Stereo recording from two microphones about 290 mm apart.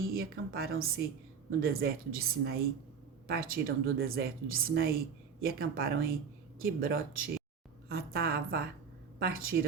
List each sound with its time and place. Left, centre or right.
0.1 s a woman's voice: right